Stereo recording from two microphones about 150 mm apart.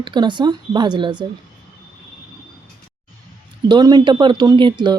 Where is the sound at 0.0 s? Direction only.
30° right (ahead or behind).